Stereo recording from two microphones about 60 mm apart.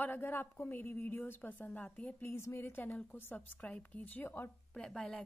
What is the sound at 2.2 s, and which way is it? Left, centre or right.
A woman's voice, left.